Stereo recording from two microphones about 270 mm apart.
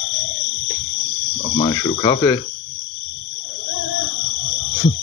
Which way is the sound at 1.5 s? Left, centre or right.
Centre.